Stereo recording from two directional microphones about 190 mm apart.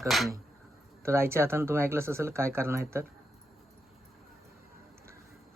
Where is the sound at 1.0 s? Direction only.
15° right (ahead or behind).